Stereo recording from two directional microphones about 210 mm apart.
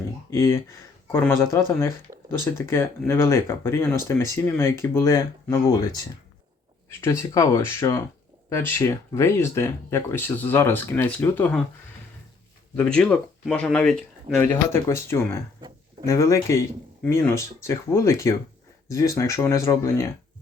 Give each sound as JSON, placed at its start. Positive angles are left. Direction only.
{"t": 0.3, "sound": "speech", "side_deg": 15}
{"t": 12.7, "sound": "speech", "side_deg": 5}